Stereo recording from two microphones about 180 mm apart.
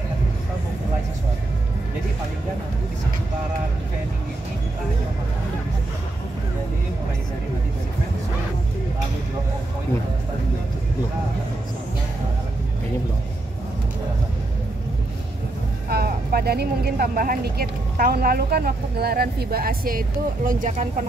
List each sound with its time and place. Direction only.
15.9 s speech: 60° right (ahead or behind)